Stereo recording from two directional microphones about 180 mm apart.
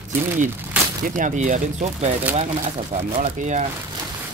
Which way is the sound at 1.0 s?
45° right (ahead or behind).